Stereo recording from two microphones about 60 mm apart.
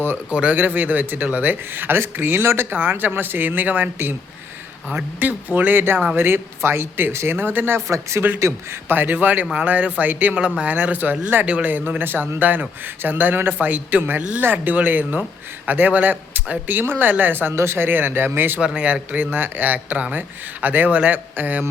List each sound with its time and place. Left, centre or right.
0.3 s speech: centre
0.5 s speech: right
4.9 s speech: right
6.1 s speech: right
7.9 s a man's voice: right
8.9 s speech: right
17.5 s speech: right
18.8 s speech: right